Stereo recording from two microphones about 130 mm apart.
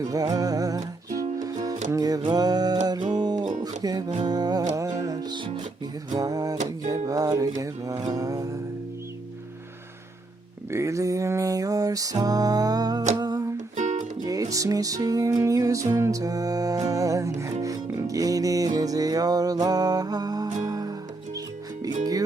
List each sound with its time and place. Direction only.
0.0 s music: 30° right (ahead or behind)
10.7 s music: 20° right (ahead or behind)
13.1 s humming: 30° right (ahead or behind)
13.7 s music: 75° right (ahead or behind)
14.3 s music: 25° right (ahead or behind)